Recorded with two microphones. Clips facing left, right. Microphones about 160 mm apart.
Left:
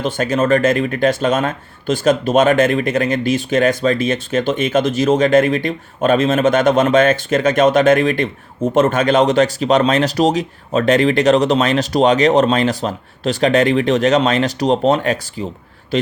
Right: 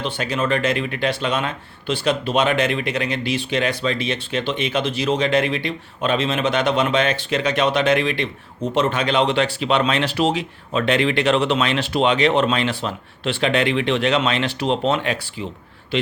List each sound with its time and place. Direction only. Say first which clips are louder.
0.0 s speech: left 6 dB; 45° left (ahead or behind)